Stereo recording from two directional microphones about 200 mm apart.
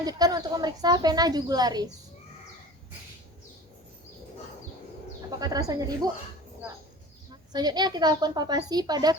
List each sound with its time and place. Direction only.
0.0 s a woman's voice: 20° right (ahead or behind)
5.4 s a woman's voice: 20° right (ahead or behind)
7.5 s a woman's voice: 20° right (ahead or behind)